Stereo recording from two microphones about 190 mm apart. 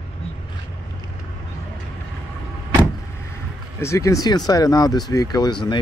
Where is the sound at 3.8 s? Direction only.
15° left (ahead or behind).